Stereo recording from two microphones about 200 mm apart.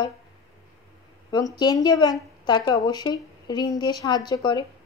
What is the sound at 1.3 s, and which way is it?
A woman's voice, 20° left (ahead or behind).